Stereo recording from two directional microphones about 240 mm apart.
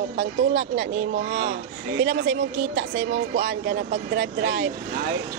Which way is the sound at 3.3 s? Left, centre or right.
Right.